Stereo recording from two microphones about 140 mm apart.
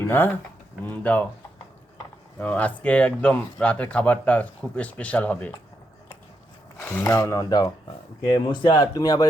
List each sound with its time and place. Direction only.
0.0 s speech: 15° left (ahead or behind)
2.4 s speech: 10° left (ahead or behind)
6.7 s a sound: 15° left (ahead or behind)
7.0 s speech: 20° left (ahead or behind)